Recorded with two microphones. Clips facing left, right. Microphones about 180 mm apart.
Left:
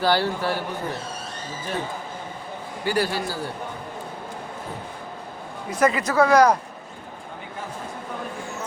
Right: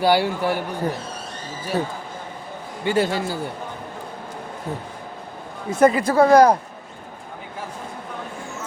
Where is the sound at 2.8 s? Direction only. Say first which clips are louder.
Right 3 dB; 25° right (ahead or behind).